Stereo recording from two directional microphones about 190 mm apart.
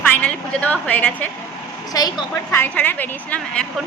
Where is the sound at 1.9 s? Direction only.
20° left (ahead or behind).